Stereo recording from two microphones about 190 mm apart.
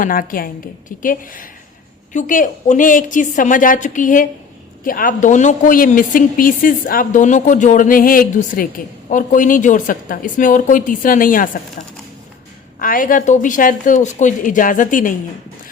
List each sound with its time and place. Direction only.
0.0 s a woman's voice: 45° left (ahead or behind)
12.8 s a woman's voice: 45° left (ahead or behind)